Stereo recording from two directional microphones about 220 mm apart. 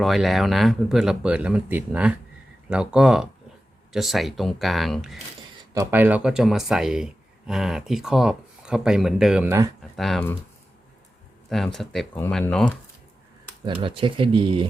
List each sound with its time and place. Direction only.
0.0 s speech: centre (ahead or behind)
5.7 s speech: 10° right (ahead or behind)
9.9 s speech: centre (ahead or behind)
11.4 s speech: centre (ahead or behind)
13.8 s speech: 25° right (ahead or behind)